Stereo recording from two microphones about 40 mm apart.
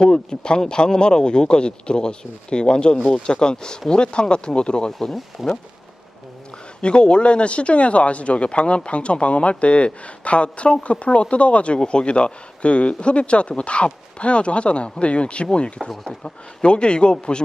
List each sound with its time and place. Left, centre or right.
0.0 s speech: left
4.9 s speech: centre
6.8 s speech: left
15.8 s speech: centre
16.2 s speech: left